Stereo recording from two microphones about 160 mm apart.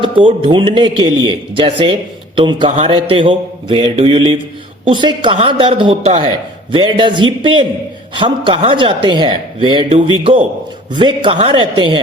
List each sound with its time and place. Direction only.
0.2 s a man's voice: 35° right (ahead or behind)